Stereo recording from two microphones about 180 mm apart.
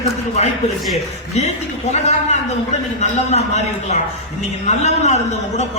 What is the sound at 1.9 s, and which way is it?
A man's voice, 40° left (ahead or behind).